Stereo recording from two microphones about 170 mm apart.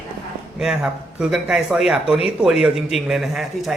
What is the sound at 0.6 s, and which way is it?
Speech, 5° right (ahead or behind).